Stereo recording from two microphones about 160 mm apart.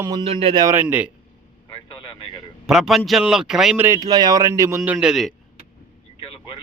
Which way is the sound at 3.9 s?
25° right (ahead or behind).